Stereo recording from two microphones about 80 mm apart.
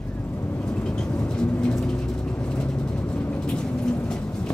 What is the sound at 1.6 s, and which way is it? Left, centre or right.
Vehicle, centre.